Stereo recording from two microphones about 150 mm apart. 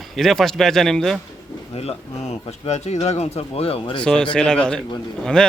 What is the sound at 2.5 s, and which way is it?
Speech, 45° left (ahead or behind).